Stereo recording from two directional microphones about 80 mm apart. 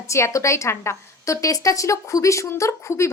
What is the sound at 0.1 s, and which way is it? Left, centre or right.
A woman's voice, left.